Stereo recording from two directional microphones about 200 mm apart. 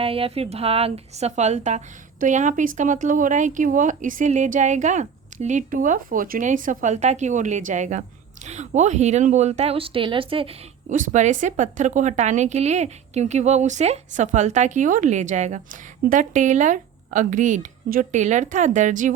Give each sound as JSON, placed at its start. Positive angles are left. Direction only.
{"t": 0.0, "sound": "a woman's voice", "side_deg": -30}
{"t": 10.9, "sound": "a woman's voice", "side_deg": -40}